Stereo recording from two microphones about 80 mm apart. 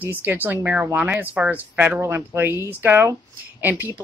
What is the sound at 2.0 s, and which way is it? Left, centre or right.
Speech, right.